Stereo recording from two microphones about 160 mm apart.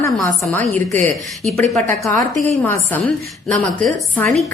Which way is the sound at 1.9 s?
20° left (ahead or behind).